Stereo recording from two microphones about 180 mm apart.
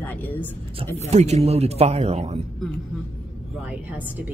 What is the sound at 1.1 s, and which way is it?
Speech, 40° right (ahead or behind).